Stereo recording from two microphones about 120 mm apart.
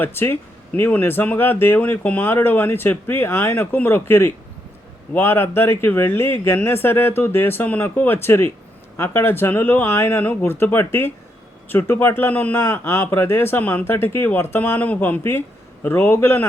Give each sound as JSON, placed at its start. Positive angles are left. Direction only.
{"t": 0.0, "sound": "speech", "side_deg": 20}